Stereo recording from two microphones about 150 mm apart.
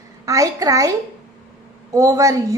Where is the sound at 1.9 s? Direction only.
25° right (ahead or behind).